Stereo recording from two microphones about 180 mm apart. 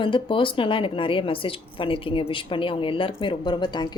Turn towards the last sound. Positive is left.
turn(degrees=25)  # may be behind; listen again after turning